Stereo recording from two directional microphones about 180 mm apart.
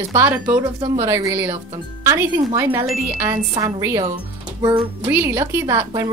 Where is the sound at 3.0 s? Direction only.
15° right (ahead or behind).